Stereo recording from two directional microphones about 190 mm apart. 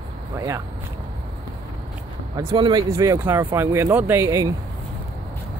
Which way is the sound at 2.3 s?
25° right (ahead or behind).